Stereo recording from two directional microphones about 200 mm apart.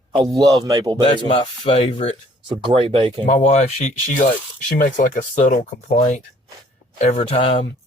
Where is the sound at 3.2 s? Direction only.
35° left (ahead or behind).